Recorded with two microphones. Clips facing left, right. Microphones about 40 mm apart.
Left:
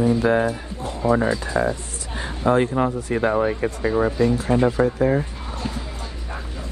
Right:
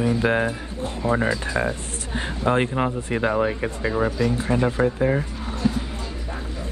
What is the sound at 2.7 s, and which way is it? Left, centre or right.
Speech, right.